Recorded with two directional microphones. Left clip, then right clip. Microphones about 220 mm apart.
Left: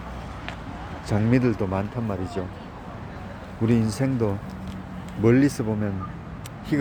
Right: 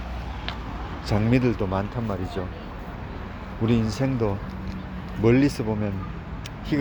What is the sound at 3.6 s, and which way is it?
Speech, 15° left (ahead or behind).